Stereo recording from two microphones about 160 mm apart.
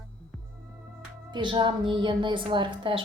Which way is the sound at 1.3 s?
30° right (ahead or behind).